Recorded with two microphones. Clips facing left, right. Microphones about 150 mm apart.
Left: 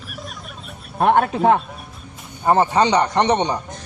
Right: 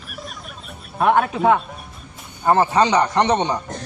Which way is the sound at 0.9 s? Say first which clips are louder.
Left 1 dB; 35° left (ahead or behind).